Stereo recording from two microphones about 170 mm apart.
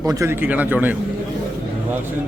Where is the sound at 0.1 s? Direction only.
15° right (ahead or behind).